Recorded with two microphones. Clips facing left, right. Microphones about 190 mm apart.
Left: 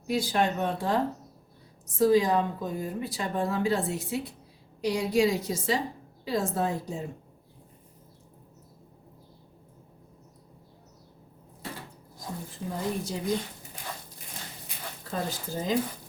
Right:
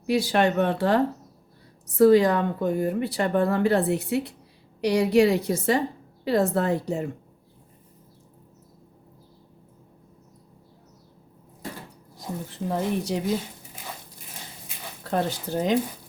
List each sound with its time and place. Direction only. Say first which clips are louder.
0.0 s speech: right 5 dB; 70° right (ahead or behind)
12.5 s speech: right 6 dB; 75° right (ahead or behind)
15.0 s speech: right 7 dB; 70° right (ahead or behind)